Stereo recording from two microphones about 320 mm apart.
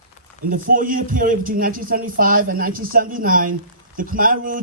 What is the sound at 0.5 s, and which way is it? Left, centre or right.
A man's voice, right.